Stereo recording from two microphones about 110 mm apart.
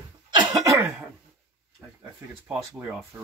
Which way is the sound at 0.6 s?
25° right (ahead or behind).